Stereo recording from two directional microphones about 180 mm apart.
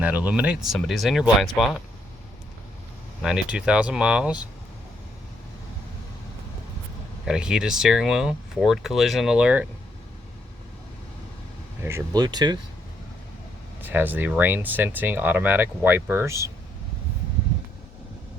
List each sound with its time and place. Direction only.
0.0 s speech: 10° right (ahead or behind)
3.2 s speech: 5° right (ahead or behind)
7.3 s speech: 5° right (ahead or behind)
11.8 s speech: 15° right (ahead or behind)
13.8 s speech: 10° right (ahead or behind)